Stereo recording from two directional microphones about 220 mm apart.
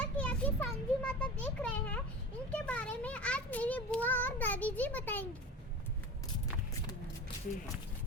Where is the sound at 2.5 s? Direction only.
5° left (ahead or behind).